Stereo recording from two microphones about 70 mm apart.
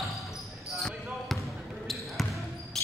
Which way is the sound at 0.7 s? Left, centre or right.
Centre.